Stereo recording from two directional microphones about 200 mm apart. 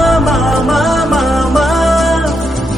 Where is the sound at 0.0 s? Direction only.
Centre (ahead or behind).